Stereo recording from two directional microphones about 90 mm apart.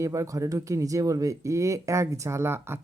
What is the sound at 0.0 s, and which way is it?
Speech, 35° right (ahead or behind).